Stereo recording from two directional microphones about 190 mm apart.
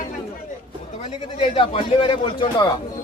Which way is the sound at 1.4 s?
30° left (ahead or behind).